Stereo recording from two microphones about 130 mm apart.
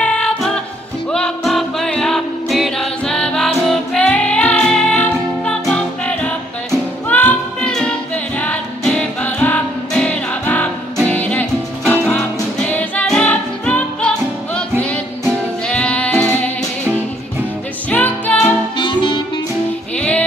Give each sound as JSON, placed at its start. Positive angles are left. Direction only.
{"t": 0.0, "sound": "a capella", "side_deg": 5}
{"t": 1.1, "sound": "music", "side_deg": 5}
{"t": 15.6, "sound": "music", "side_deg": 10}
{"t": 17.8, "sound": "music", "side_deg": 10}
{"t": 18.8, "sound": "music", "side_deg": 35}
{"t": 20.0, "sound": "music", "side_deg": 10}